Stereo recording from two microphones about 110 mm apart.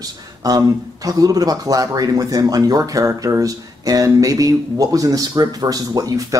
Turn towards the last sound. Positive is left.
turn(degrees=-30)  # may be behind; listen again after turning